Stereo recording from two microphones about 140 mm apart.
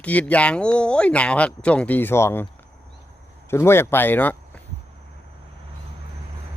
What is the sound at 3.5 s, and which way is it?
Speech, 15° left (ahead or behind).